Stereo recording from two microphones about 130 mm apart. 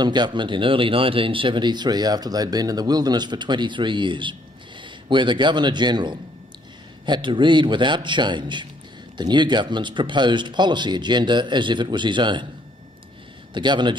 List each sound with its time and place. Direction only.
0.0 s a man's voice: 35° right (ahead or behind)
13.5 s speech: 35° right (ahead or behind)